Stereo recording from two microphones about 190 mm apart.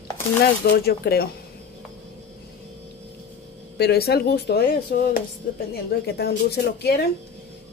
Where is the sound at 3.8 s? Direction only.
55° left (ahead or behind).